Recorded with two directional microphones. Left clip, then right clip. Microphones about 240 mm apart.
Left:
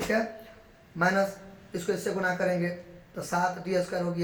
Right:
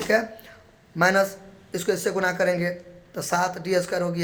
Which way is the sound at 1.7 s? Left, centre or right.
Right.